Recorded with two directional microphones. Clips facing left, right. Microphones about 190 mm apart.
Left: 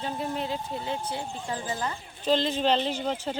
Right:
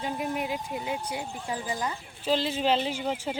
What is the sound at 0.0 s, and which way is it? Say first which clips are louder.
Speech: even; 15° right (ahead or behind).